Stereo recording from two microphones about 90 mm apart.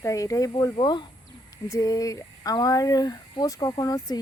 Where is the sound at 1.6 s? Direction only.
40° left (ahead or behind).